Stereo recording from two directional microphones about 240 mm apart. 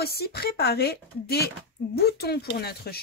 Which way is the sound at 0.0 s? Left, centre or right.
Left.